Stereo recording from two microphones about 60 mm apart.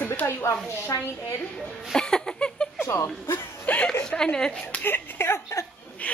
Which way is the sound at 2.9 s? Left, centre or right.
Left.